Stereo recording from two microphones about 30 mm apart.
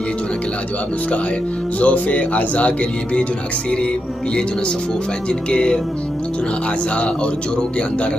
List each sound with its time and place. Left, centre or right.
1.8 s speech: left
5.5 s music: left